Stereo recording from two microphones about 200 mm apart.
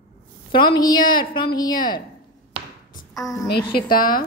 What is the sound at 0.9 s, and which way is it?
Speech, 45° left (ahead or behind).